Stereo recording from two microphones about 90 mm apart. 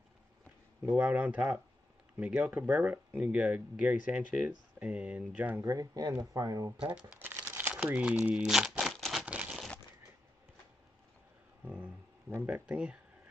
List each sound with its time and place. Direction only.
0.8 s speech: 15° right (ahead or behind)
5.6 s speech: 40° right (ahead or behind)
6.9 s speech: 10° right (ahead or behind)
7.2 s crumpling: 20° right (ahead or behind)
7.7 s crumpling: 10° right (ahead or behind)
9.2 s crumpling: 15° right (ahead or behind)
11.6 s a sound: 15° right (ahead or behind)
12.4 s speech: 15° right (ahead or behind)